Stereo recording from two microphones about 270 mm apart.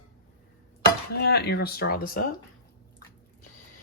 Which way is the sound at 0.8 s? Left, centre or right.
Left.